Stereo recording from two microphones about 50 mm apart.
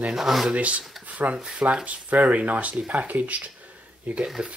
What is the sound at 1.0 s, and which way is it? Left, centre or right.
Dishes, right.